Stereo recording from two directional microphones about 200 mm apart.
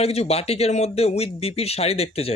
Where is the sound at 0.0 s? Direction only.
30° left (ahead or behind).